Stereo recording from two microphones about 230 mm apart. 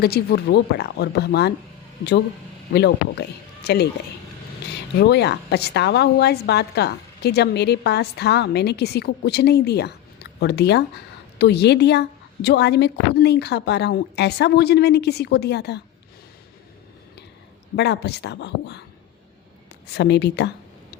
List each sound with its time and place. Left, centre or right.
0.0 s a woman's voice: left
2.7 s a woman's voice: left
17.7 s a woman's voice: left
19.9 s a woman's voice: left